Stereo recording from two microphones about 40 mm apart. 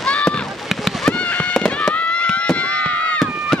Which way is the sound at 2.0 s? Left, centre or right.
Left.